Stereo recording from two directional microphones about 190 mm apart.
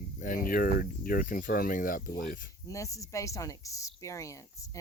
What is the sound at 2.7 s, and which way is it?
Speech, 15° left (ahead or behind).